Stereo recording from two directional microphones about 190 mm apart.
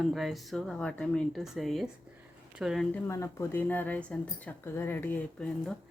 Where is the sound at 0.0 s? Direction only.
Centre (ahead or behind).